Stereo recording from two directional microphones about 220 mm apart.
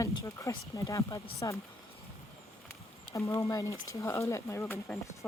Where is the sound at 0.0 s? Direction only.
15° left (ahead or behind).